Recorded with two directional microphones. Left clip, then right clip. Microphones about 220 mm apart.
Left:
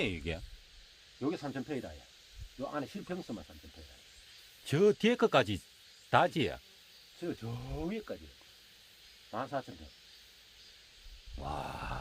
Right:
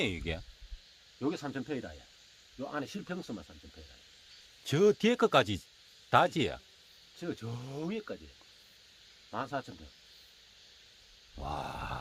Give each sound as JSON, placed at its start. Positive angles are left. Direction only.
{"t": 0.0, "sound": "speech", "side_deg": -15}
{"t": 1.2, "sound": "speech", "side_deg": -45}
{"t": 4.6, "sound": "speech", "side_deg": -15}
{"t": 7.2, "sound": "speech", "side_deg": -50}
{"t": 9.3, "sound": "speech", "side_deg": -50}
{"t": 11.3, "sound": "speech", "side_deg": -15}